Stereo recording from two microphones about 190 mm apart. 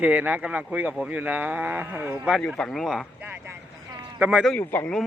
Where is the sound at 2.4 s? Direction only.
5° left (ahead or behind).